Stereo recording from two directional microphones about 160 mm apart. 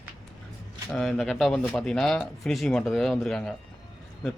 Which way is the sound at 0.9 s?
Centre (ahead or behind).